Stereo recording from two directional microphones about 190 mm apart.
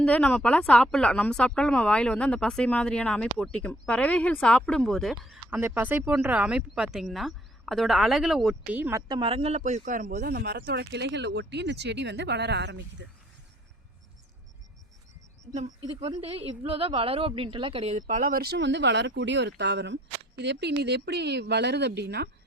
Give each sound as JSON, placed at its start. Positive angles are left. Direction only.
{"t": 0.0, "sound": "speech", "side_deg": 5}
{"t": 16.0, "sound": "speech", "side_deg": -30}